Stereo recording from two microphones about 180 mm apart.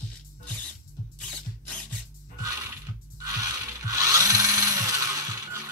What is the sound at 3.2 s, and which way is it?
Tools, 15° right (ahead or behind).